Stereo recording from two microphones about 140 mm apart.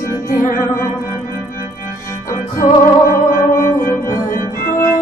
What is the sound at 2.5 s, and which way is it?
Music, 75° left (ahead or behind).